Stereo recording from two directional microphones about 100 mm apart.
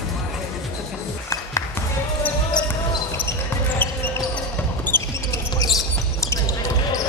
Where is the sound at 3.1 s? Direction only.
20° left (ahead or behind).